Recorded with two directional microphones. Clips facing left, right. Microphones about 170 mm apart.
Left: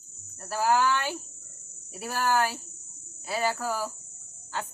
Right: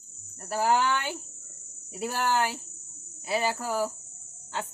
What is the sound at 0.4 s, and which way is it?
Speech, 20° right (ahead or behind).